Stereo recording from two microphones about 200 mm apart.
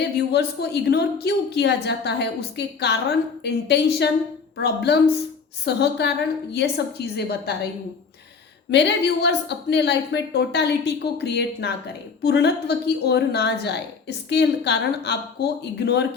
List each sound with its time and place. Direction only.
0.3 s a woman's voice: 55° left (ahead or behind)
8.7 s a woman's voice: 60° left (ahead or behind)